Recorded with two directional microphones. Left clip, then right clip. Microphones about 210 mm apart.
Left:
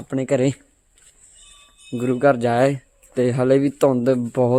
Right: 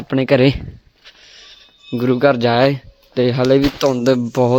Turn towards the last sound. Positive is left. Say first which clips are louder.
# right 4 dB
turn(degrees=-20)  # may be behind; listen again after turning